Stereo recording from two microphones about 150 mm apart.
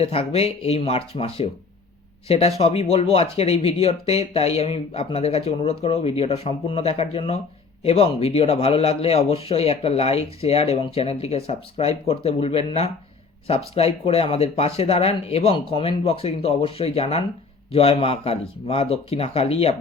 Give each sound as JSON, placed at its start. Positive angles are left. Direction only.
{"t": 0.0, "sound": "a man's voice", "side_deg": 40}